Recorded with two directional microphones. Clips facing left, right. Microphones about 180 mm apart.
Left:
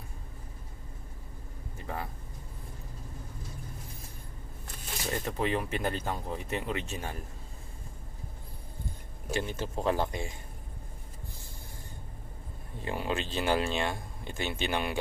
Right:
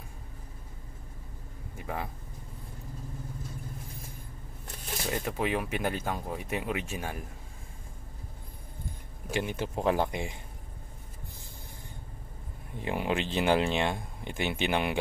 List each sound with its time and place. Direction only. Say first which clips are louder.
1.8 s a sound: right 2 dB; 10° right (ahead or behind)
5.1 s speech: even; 10° right (ahead or behind)
9.3 s speech: right 1 dB; 15° right (ahead or behind)
12.8 s speech: right 3 dB; 15° right (ahead or behind)